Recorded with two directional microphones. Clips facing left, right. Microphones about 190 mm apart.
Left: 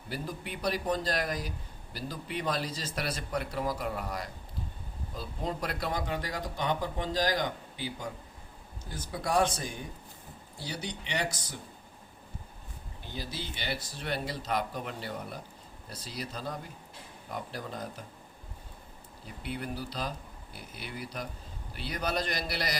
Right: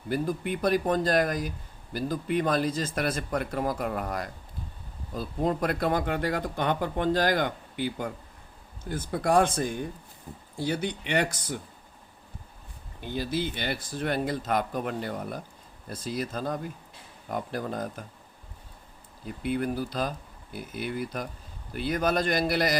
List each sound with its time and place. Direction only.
0.1 s a man's voice: 50° right (ahead or behind)
13.3 s a man's voice: 50° right (ahead or behind)
19.4 s a man's voice: 50° right (ahead or behind)